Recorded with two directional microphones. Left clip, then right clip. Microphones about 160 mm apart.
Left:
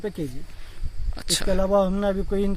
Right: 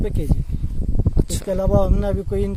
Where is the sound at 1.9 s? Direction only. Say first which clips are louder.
Right 1 dB; 55° right (ahead or behind).